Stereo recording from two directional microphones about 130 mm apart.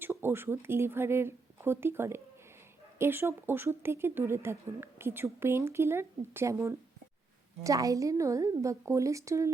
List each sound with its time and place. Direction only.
0.0 s speech: 15° right (ahead or behind)